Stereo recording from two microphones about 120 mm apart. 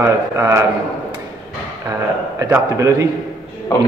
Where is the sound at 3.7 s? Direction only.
25° left (ahead or behind).